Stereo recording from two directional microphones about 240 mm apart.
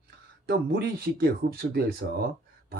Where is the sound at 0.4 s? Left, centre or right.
Right.